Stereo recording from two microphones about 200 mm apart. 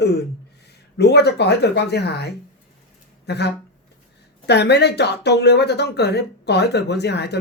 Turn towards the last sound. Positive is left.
turn(degrees=55)  # may be behind; listen again after turning